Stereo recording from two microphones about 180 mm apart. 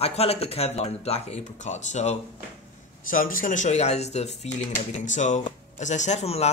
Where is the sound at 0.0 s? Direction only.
35° left (ahead or behind).